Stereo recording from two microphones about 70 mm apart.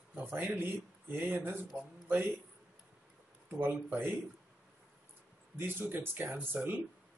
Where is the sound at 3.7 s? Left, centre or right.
Right.